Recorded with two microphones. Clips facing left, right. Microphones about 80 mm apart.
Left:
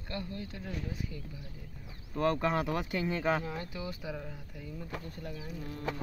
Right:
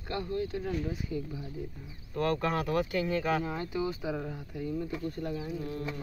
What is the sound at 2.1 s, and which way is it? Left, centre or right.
Speech, centre.